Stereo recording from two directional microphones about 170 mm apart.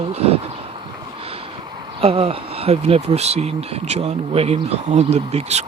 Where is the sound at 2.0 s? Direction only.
35° right (ahead or behind).